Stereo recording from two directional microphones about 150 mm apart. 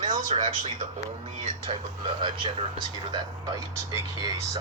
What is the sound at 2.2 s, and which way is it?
Speech, 30° right (ahead or behind).